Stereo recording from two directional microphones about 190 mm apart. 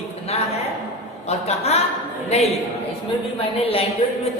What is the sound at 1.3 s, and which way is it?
A woman's voice, 35° left (ahead or behind).